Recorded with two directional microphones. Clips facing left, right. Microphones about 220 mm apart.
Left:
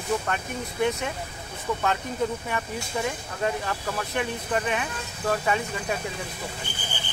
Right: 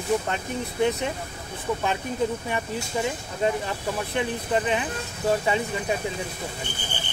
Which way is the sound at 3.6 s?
20° right (ahead or behind).